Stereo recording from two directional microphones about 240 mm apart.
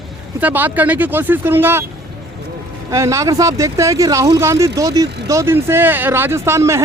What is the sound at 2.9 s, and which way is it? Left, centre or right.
Speech, centre.